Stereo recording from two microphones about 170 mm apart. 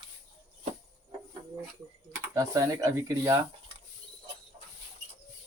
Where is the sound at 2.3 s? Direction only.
20° right (ahead or behind).